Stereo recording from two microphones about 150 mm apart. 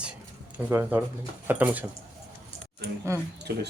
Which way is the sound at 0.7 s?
15° right (ahead or behind).